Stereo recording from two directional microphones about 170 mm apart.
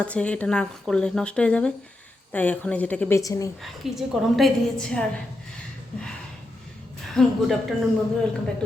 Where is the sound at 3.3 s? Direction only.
20° left (ahead or behind).